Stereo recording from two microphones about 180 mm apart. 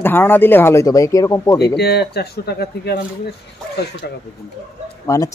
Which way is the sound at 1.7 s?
65° left (ahead or behind).